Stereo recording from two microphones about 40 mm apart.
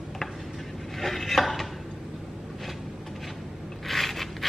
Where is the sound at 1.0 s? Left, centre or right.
Centre.